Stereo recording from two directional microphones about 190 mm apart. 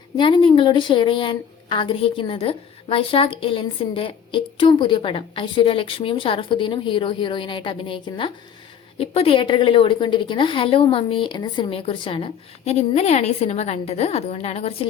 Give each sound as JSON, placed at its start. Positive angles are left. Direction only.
{"t": 0.2, "sound": "a woman's voice", "side_deg": 25}